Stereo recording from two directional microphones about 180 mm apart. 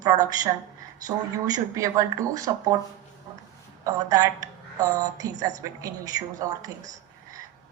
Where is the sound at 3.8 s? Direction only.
20° right (ahead or behind).